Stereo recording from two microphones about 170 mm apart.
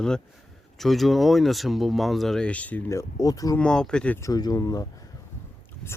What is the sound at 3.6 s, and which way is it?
Speech, 5° left (ahead or behind).